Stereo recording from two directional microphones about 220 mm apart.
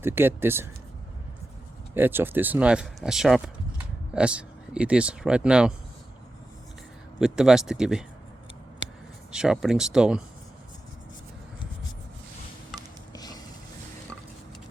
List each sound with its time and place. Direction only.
0.0 s speech: 10° right (ahead or behind)
2.0 s speech: 10° right (ahead or behind)
7.2 s speech: centre (ahead or behind)
9.3 s speech: 5° right (ahead or behind)
13.1 s mechanisms: 15° left (ahead or behind)